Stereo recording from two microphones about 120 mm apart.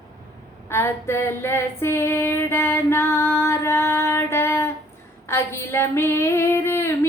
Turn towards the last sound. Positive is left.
turn(degrees=20)  # may be behind; listen again after turning